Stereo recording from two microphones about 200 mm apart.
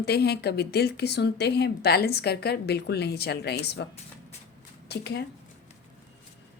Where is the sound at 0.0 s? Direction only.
55° left (ahead or behind).